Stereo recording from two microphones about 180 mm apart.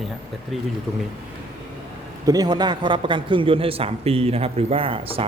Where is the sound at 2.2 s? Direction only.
20° right (ahead or behind).